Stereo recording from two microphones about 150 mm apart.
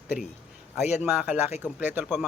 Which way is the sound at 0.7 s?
50° left (ahead or behind).